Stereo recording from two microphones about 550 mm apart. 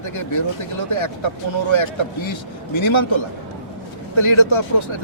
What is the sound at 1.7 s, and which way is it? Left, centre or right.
Speech, left.